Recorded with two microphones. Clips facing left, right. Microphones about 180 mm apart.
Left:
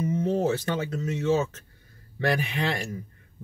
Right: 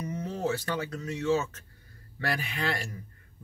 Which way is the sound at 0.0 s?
25° left (ahead or behind).